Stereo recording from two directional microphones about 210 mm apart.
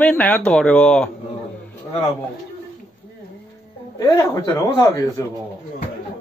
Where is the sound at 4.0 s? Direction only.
15° left (ahead or behind).